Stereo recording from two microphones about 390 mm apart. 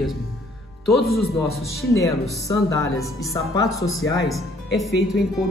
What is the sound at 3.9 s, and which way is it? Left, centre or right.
A man's voice, centre.